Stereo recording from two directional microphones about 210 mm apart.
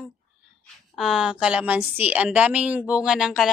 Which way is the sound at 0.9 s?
Centre (ahead or behind).